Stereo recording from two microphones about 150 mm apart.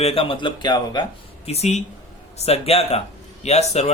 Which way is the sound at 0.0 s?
40° left (ahead or behind).